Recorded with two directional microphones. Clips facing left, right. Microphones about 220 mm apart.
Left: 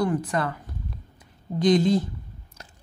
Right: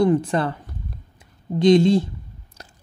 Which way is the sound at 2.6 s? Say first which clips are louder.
Right 3 dB; 35° right (ahead or behind).